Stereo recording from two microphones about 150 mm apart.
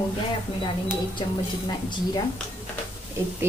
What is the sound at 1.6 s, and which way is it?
Speech, 30° left (ahead or behind).